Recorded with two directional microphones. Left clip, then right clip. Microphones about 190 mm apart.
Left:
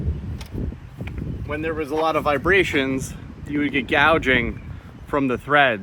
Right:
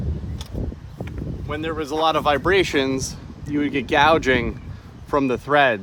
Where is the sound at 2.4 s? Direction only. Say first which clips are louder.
Left 4 dB; 30° right (ahead or behind).